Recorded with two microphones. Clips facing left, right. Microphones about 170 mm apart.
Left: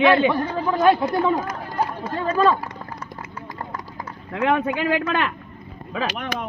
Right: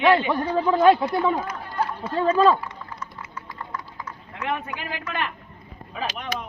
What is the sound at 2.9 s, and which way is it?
Clip-clop, 40° left (ahead or behind).